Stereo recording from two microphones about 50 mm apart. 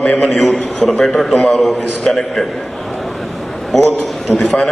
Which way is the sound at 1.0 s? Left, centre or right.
Centre.